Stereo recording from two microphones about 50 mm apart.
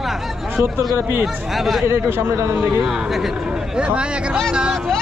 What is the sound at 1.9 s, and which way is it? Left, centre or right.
Speech, right.